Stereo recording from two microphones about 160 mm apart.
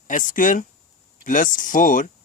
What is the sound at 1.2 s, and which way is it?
Speech, 55° left (ahead or behind).